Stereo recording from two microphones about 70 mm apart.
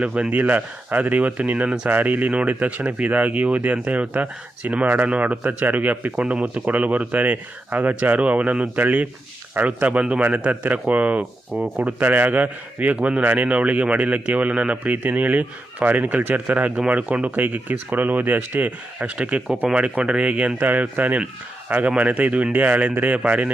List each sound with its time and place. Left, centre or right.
0.0 s a man's voice: centre